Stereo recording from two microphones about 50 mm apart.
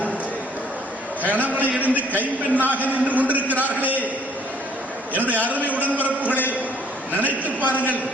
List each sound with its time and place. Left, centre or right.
1.3 s a man's voice: right
5.3 s a man's voice: right